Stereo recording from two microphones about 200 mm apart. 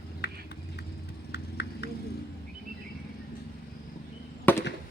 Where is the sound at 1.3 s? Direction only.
55° left (ahead or behind).